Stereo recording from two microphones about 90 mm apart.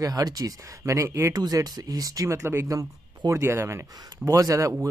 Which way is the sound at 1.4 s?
50° right (ahead or behind).